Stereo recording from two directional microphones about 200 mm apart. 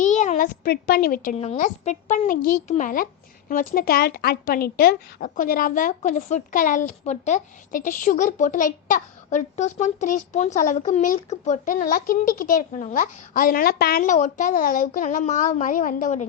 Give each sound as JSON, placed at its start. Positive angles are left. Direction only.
{"t": 0.0, "sound": "a child's voice", "side_deg": 35}